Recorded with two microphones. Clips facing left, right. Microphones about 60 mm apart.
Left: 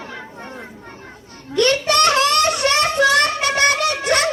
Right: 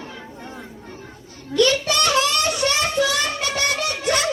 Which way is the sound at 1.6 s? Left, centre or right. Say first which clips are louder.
Left 3 dB; left.